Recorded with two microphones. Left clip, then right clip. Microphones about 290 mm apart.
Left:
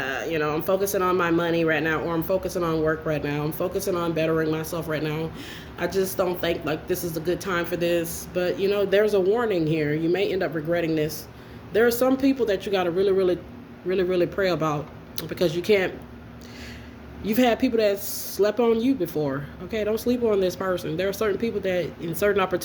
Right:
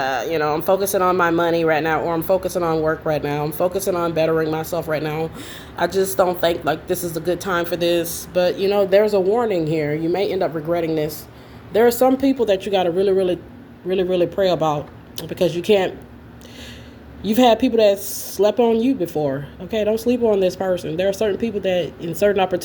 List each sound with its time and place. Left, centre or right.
0.0 s speech: right
14.5 s speech: centre
14.8 s speech: right
17.2 s speech: right